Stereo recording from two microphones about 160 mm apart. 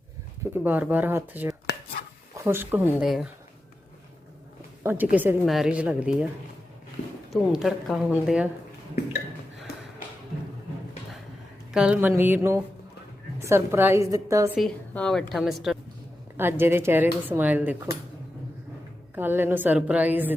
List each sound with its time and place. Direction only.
0.5 s a woman's voice: 10° right (ahead or behind)
1.7 s chopping: 90° left
2.3 s speech: 15° right (ahead or behind)
4.8 s a woman's voice: 10° right (ahead or behind)
7.5 s a woman's voice: centre (ahead or behind)
11.7 s a woman's voice: 5° right (ahead or behind)
14.5 s a woman's voice: 5° left (ahead or behind)
16.4 s a woman's voice: 15° right (ahead or behind)
19.1 s a woman's voice: 15° right (ahead or behind)